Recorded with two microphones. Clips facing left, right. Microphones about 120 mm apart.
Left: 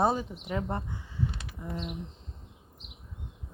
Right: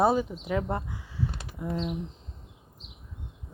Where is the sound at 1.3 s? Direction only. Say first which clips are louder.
Right 2 dB; 40° right (ahead or behind).